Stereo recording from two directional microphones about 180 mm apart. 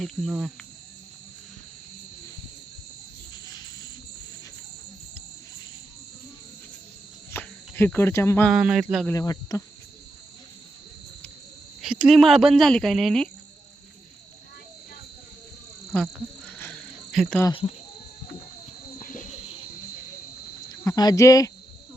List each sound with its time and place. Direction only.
0.0 s cricket: centre (ahead or behind)
7.3 s cricket: 10° left (ahead or behind)
8.4 s cricket: 5° right (ahead or behind)
9.0 s speech: 20° left (ahead or behind)
11.8 s cricket: 5° right (ahead or behind)
15.9 s speech: 10° left (ahead or behind)
16.5 s cricket: 10° left (ahead or behind)
17.1 s speech: centre (ahead or behind)
18.9 s cricket: 50° left (ahead or behind)
20.7 s speech: 20° left (ahead or behind)